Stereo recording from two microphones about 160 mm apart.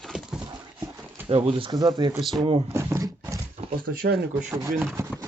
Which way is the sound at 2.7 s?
15° right (ahead or behind).